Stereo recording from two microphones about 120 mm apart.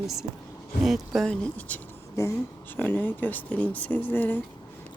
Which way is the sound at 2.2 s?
25° left (ahead or behind).